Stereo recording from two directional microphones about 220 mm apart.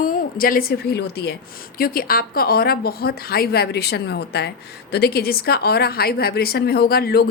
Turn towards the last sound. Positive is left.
turn(degrees=45)  # may be behind; listen again after turning